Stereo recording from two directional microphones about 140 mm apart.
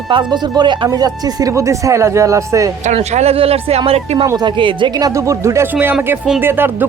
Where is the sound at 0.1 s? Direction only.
30° right (ahead or behind).